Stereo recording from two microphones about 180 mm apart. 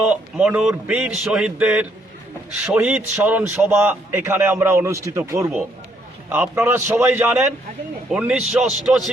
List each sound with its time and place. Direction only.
0.1 s a man's voice: 5° right (ahead or behind)
5.4 s a man's voice: centre (ahead or behind)